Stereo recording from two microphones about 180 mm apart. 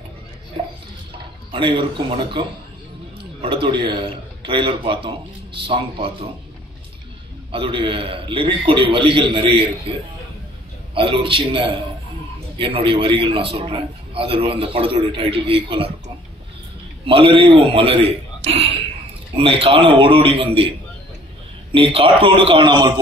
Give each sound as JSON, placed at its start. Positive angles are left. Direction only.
{"t": 1.5, "sound": "a man's voice", "side_deg": -25}
{"t": 7.5, "sound": "a man's voice", "side_deg": -30}
{"t": 17.0, "sound": "a man's voice", "side_deg": -30}
{"t": 21.7, "sound": "a man's voice", "side_deg": -30}